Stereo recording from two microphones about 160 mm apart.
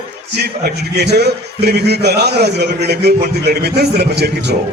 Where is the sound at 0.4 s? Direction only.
90° right.